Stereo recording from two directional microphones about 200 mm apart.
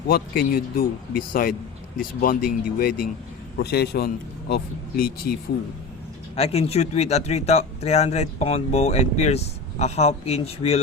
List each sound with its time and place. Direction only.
0.1 s speech: 45° left (ahead or behind)
6.3 s speech: 30° left (ahead or behind)